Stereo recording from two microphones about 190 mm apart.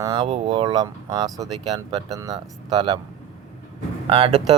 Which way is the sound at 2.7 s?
25° right (ahead or behind).